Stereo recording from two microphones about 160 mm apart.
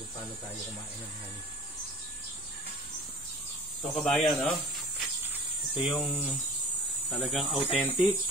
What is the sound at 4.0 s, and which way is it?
Speech, 5° left (ahead or behind).